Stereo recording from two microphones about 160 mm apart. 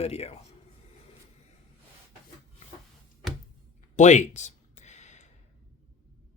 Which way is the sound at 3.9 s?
50° left (ahead or behind).